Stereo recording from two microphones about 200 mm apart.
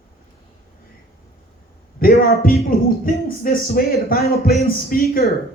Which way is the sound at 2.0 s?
50° left (ahead or behind).